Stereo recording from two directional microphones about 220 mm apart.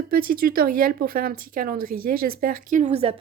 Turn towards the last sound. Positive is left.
turn(degrees=-30)  # may be behind; listen again after turning